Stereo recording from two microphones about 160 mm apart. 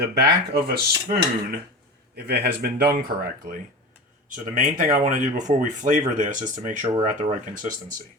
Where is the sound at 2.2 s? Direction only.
90° right.